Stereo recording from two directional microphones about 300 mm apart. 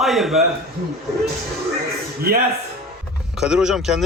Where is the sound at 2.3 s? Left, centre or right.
Right.